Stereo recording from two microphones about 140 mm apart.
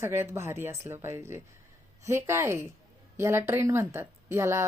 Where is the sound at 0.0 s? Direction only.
15° right (ahead or behind).